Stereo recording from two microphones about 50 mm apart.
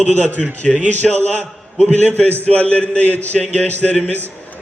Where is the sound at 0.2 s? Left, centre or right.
Left.